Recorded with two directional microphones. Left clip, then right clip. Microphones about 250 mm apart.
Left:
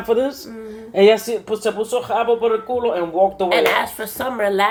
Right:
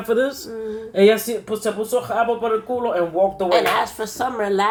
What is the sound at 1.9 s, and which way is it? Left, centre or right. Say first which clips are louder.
Speech: left 1 dB; left.